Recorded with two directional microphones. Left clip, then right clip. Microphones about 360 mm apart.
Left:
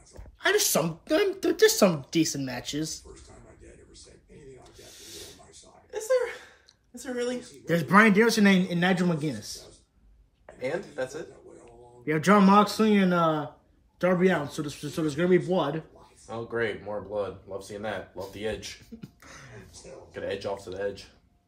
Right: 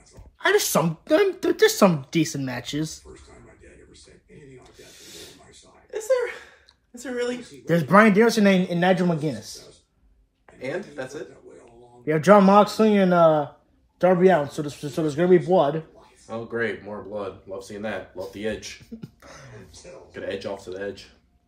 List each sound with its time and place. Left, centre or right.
0.4 s a woman's voice: centre
4.7 s snake: centre
5.9 s a sound: centre
7.6 s a man's voice: centre
10.6 s speech: left
12.0 s a man's voice: centre
16.3 s speech: centre
18.9 s a sound: centre
20.2 s speech: left